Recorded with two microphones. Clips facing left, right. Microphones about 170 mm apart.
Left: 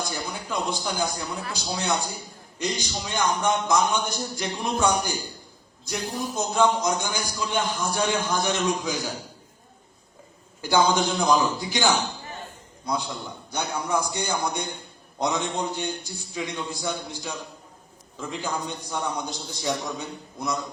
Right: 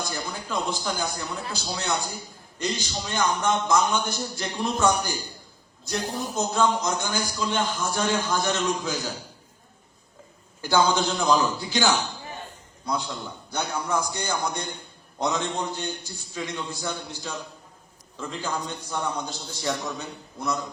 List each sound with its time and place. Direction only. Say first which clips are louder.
0.1 s a sound: even; 15° left (ahead or behind)
1.6 s a man's voice: left 2 dB; 10° left (ahead or behind)
10.6 s a man's voice: left 1 dB; 15° left (ahead or behind)